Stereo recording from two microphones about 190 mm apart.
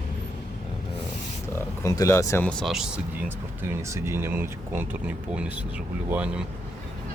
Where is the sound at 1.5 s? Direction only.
15° left (ahead or behind); by 6.3 s 10° right (ahead or behind).